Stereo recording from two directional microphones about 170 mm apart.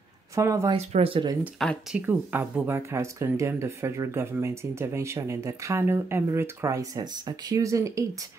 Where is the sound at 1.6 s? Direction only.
Centre (ahead or behind).